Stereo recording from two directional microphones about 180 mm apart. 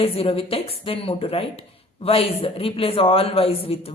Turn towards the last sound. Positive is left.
turn(degrees=30)  # may be behind; listen again after turning